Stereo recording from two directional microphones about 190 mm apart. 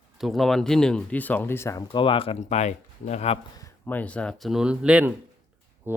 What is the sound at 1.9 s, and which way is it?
Speech, 25° left (ahead or behind).